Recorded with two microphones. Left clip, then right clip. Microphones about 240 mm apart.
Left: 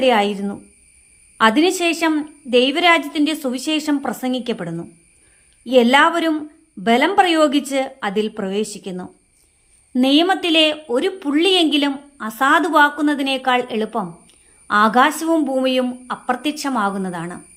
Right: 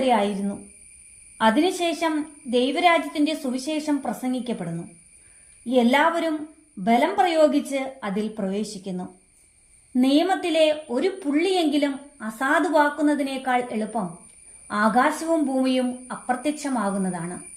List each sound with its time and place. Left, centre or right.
0.0 s speech: centre
1.4 s a woman's voice: centre